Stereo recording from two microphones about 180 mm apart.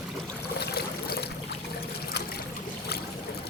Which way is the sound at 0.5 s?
60° left (ahead or behind).